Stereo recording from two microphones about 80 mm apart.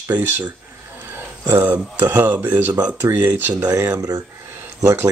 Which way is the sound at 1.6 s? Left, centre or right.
Right.